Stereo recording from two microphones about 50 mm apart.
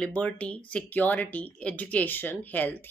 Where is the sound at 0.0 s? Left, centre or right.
Left.